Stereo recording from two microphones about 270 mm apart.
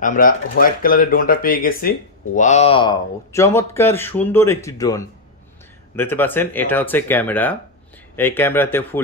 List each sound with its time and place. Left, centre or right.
0.0 s speech: left; by 9.1 s centre